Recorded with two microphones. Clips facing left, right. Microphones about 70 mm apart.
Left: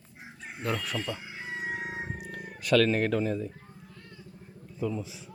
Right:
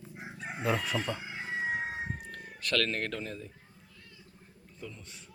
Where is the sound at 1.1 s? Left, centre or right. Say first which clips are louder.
Right 1 dB; right.